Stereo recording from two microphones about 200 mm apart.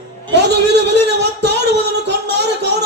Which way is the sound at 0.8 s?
60° right (ahead or behind).